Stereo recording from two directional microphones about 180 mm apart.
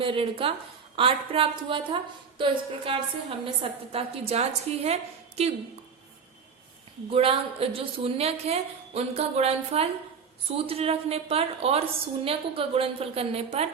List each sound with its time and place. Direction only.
0.0 s a woman's voice: 30° right (ahead or behind)
7.1 s a woman's voice: 30° right (ahead or behind)